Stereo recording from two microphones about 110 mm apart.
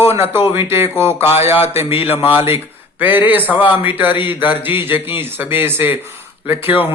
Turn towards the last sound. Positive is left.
turn(degrees=-20)  # may be behind; listen again after turning